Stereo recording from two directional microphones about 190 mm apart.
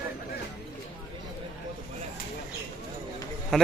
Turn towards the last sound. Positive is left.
turn(degrees=5)  # may be behind; listen again after turning